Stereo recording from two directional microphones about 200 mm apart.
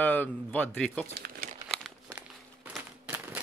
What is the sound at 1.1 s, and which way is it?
Crumpling, 50° right (ahead or behind).